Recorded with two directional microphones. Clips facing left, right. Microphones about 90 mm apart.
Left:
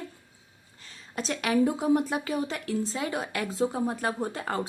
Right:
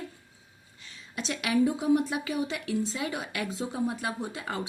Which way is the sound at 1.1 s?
40° left (ahead or behind).